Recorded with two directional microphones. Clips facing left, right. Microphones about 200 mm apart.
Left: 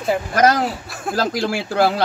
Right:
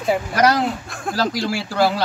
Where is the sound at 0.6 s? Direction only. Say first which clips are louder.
Even; centre (ahead or behind).